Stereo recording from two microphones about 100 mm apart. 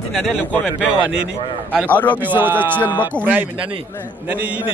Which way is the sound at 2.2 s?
20° right (ahead or behind).